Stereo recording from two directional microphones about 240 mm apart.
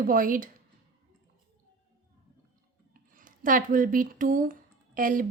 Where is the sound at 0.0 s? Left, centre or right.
Right.